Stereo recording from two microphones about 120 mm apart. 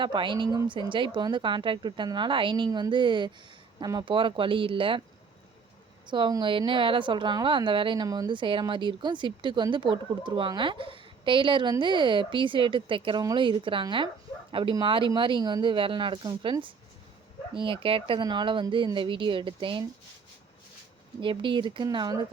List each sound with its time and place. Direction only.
0.0 s speech: 40° right (ahead or behind)
6.1 s speech: 40° right (ahead or behind)
8.0 s speech: 30° right (ahead or behind)
21.2 s speech: 45° right (ahead or behind)
21.8 s speech: 30° right (ahead or behind)